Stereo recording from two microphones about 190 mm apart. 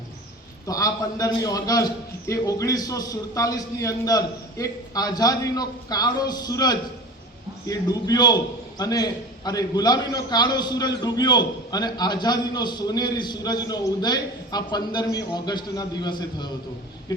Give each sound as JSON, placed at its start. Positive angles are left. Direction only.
{"t": 0.7, "sound": "a man's voice", "side_deg": 20}